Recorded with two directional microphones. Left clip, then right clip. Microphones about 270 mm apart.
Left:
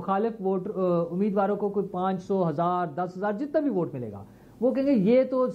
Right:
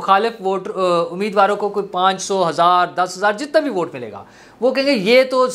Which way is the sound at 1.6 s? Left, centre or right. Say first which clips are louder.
Right 8 dB; right.